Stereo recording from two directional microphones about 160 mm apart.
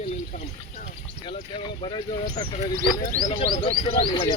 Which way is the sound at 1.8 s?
30° left (ahead or behind).